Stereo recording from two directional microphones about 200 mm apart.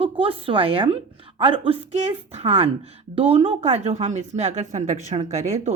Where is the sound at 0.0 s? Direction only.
25° right (ahead or behind).